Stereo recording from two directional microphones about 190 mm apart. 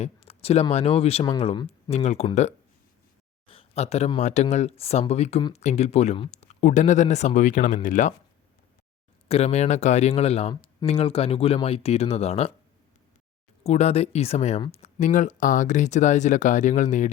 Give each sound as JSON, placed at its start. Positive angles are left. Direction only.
{"t": 0.0, "sound": "speech", "side_deg": 30}
{"t": 9.3, "sound": "speech", "side_deg": 35}
{"t": 10.5, "sound": "speech", "side_deg": 20}
{"t": 13.7, "sound": "speech", "side_deg": 35}